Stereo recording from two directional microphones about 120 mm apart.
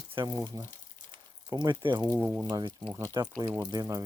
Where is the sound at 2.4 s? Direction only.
35° right (ahead or behind).